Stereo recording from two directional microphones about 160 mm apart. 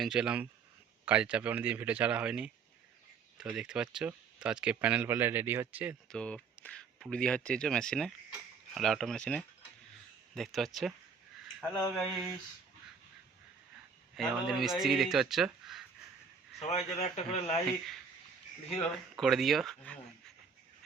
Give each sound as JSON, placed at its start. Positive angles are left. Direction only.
{"t": 0.0, "sound": "speech", "side_deg": -5}
{"t": 6.1, "sound": "speech", "side_deg": 5}
{"t": 14.2, "sound": "speech", "side_deg": 0}
{"t": 16.6, "sound": "a man's voice", "side_deg": 45}
{"t": 19.2, "sound": "speech", "side_deg": 0}